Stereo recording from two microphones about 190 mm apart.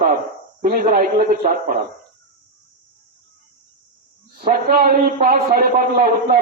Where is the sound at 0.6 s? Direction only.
50° right (ahead or behind).